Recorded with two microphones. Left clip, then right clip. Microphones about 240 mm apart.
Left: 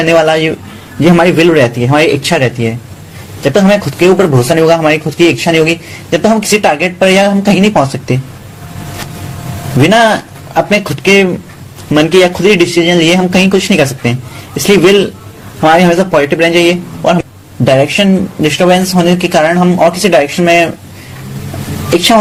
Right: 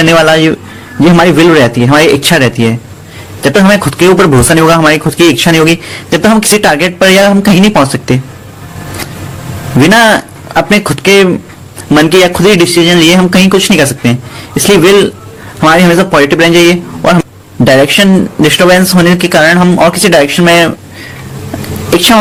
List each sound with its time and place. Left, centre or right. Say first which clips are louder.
0.1 s a man's voice: even; right
9.8 s a man's voice: right 2 dB; right